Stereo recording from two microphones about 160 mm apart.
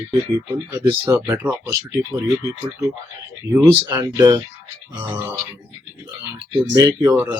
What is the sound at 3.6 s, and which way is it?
Speech, 15° right (ahead or behind).